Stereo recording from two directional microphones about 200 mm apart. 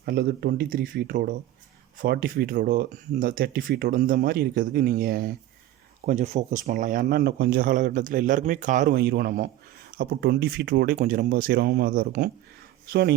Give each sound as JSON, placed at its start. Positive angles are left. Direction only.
{"t": 0.0, "sound": "speech", "side_deg": -50}
{"t": 6.1, "sound": "speech", "side_deg": -35}